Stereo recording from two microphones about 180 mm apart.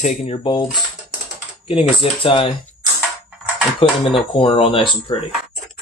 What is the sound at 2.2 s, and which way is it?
Speech, 30° left (ahead or behind).